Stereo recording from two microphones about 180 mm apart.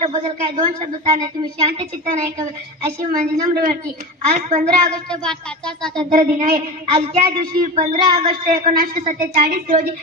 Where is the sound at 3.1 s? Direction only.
50° right (ahead or behind).